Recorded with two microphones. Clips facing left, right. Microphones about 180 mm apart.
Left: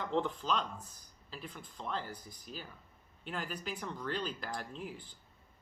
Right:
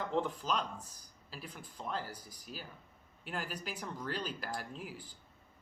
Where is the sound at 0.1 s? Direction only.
5° right (ahead or behind).